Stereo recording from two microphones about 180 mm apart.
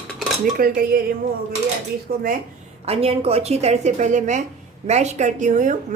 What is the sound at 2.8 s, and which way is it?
A woman's voice, 35° right (ahead or behind).